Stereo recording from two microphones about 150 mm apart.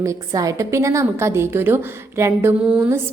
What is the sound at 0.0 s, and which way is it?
A woman's voice, 20° right (ahead or behind).